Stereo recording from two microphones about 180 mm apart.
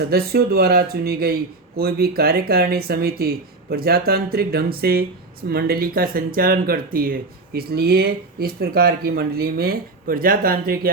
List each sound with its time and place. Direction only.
0.1 s speech: 60° right (ahead or behind)